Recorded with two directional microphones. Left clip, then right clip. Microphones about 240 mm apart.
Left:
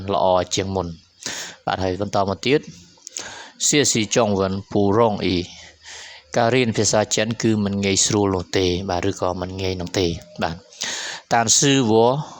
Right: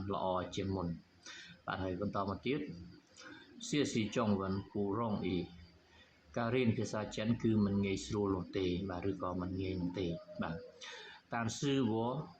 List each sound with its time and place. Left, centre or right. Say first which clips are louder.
0.1 s speech: left 19 dB; left
3.6 s speech: left 18 dB; left